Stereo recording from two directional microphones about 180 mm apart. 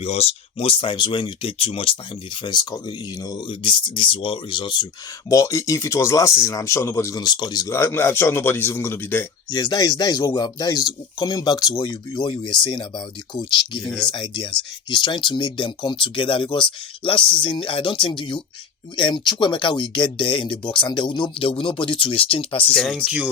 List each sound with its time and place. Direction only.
0.0 s speech: 35° left (ahead or behind)
13.8 s speech: 5° left (ahead or behind)
14.1 s speech: 25° left (ahead or behind)
22.7 s speech: 5° left (ahead or behind)
23.0 s speech: 5° right (ahead or behind)